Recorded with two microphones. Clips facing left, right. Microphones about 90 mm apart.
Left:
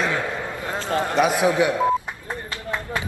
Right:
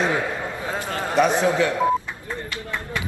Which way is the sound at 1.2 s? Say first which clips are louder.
Right 2 dB; centre (ahead or behind).